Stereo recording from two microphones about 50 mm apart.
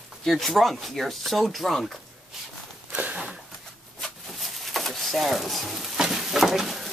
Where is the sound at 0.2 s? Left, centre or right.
Centre.